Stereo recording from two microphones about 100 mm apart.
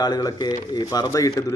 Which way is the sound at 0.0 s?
40° left (ahead or behind).